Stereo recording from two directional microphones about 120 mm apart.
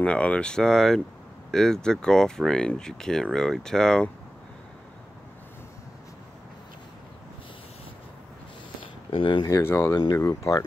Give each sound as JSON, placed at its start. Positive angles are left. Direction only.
{"t": 0.0, "sound": "speech", "side_deg": 10}
{"t": 9.1, "sound": "speech", "side_deg": 45}
{"t": 9.6, "sound": "speech", "side_deg": 20}